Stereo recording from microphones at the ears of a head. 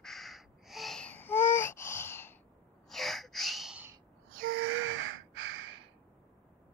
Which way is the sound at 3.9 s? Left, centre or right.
Right.